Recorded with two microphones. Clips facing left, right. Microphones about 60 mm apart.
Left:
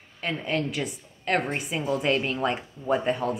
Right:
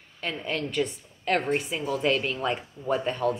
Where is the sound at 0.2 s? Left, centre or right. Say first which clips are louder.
Left 3 dB; centre.